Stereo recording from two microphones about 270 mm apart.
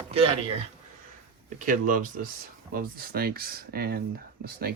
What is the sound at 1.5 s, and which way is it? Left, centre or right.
Speech, right.